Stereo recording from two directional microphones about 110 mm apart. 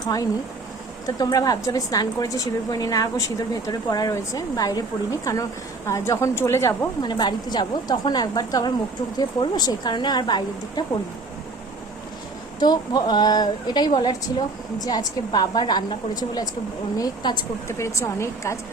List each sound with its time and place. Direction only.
0.0 s a woman's voice: 35° left (ahead or behind)
7.0 s a woman's voice: 40° left (ahead or behind)
12.5 s a woman's voice: 40° left (ahead or behind)
17.7 s a woman's voice: 25° left (ahead or behind)